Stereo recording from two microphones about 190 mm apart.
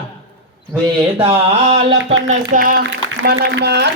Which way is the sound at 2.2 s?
45° right (ahead or behind).